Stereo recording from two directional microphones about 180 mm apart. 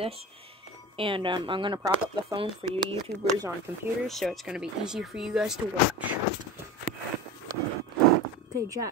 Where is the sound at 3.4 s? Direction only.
15° right (ahead or behind).